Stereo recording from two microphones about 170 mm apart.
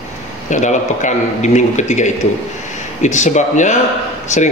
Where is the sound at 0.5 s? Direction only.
45° left (ahead or behind).